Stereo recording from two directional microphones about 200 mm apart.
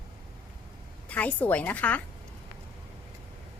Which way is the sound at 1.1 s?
5° left (ahead or behind).